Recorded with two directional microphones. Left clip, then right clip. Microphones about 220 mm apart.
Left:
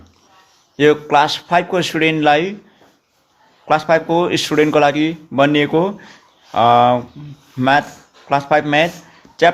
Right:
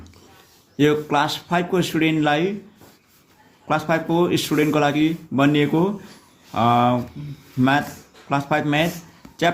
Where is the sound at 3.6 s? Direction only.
20° left (ahead or behind).